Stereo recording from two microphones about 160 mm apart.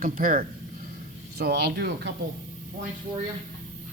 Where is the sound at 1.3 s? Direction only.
85° right.